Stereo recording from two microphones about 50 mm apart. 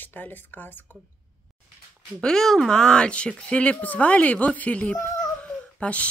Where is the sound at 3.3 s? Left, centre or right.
Left.